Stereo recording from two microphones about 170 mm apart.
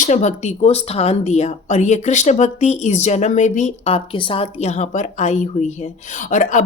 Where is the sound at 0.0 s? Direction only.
45° left (ahead or behind).